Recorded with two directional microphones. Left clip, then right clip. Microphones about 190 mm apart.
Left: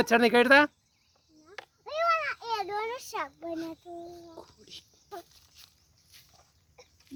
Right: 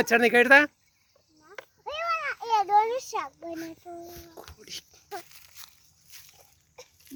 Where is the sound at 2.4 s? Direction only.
10° left (ahead or behind).